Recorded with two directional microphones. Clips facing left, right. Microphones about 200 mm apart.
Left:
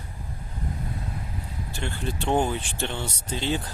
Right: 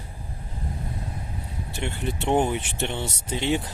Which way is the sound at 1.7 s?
20° right (ahead or behind).